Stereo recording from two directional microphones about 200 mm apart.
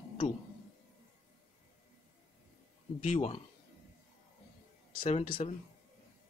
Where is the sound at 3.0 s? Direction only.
35° left (ahead or behind).